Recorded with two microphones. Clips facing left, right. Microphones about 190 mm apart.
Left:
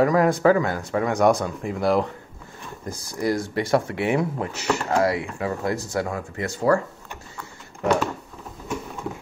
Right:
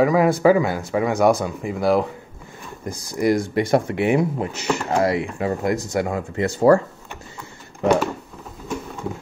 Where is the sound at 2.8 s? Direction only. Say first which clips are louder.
Right 5 dB; 20° right (ahead or behind).